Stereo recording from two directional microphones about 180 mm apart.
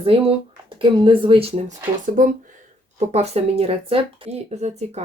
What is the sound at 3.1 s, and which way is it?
Speech, 35° right (ahead or behind).